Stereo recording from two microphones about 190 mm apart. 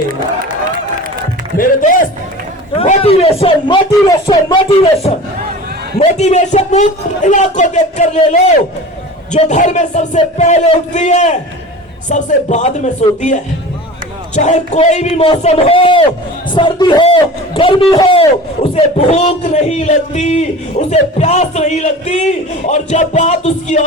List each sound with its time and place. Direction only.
1.5 s speech: 45° left (ahead or behind)
2.7 s speech: 35° left (ahead or behind)
6.0 s speech: 35° left (ahead or behind)